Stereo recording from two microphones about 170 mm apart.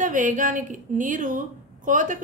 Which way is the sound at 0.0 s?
50° right (ahead or behind).